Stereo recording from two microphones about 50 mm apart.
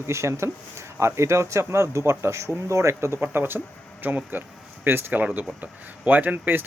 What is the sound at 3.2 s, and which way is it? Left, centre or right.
Speech, right.